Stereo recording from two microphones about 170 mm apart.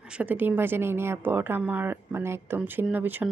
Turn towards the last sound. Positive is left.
turn(degrees=-10)  # may be behind; listen again after turning